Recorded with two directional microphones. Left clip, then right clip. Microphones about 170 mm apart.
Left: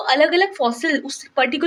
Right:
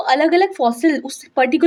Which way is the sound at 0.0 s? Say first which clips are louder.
Right 1 dB; 30° right (ahead or behind).